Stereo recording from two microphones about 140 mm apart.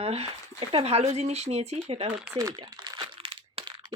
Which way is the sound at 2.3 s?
30° right (ahead or behind).